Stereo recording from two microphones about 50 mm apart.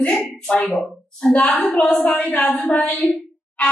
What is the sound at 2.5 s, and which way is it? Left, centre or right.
Speech, left.